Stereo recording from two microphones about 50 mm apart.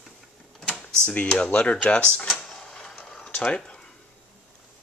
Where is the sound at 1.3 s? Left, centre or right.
Centre.